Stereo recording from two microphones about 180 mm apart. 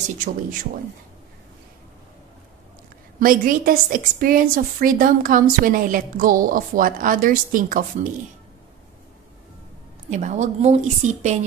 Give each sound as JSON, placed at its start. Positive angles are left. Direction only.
{"t": 3.2, "sound": "a woman's voice", "side_deg": -50}
{"t": 10.0, "sound": "a woman's voice", "side_deg": -40}